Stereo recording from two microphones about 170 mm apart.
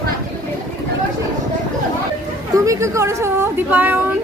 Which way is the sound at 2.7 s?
15° right (ahead or behind).